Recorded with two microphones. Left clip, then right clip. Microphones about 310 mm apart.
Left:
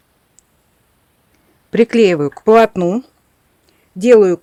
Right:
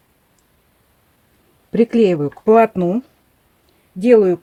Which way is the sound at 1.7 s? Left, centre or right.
Left.